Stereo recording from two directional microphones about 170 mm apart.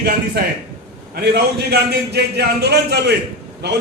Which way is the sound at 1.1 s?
70° right (ahead or behind).